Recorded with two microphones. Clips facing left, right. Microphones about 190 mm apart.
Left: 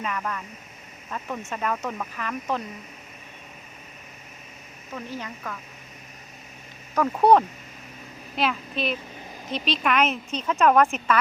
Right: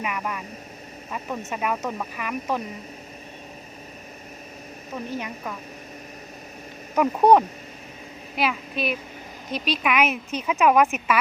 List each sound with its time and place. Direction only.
0.0 s a woman's voice: 10° right (ahead or behind)
4.9 s a woman's voice: 15° right (ahead or behind)
6.9 s a woman's voice: 15° right (ahead or behind)